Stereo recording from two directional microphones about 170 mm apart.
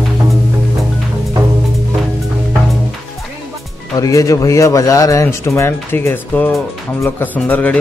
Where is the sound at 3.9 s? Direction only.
20° left (ahead or behind).